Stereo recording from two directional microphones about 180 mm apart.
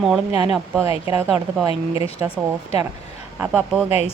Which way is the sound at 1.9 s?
15° right (ahead or behind).